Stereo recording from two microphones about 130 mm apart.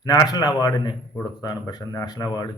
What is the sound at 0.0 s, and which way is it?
Speech, 30° left (ahead or behind).